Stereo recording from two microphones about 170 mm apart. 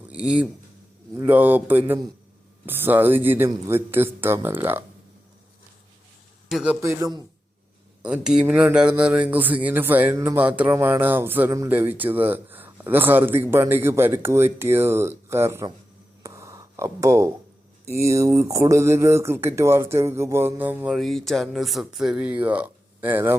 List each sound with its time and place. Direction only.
0.1 s speech: 5° right (ahead or behind)
6.5 s a man's voice: 5° right (ahead or behind)
6.8 s a man's voice: 20° right (ahead or behind)
8.0 s speech: 5° right (ahead or behind)
16.2 s a sound: 15° right (ahead or behind)
17.8 s speech: 15° right (ahead or behind)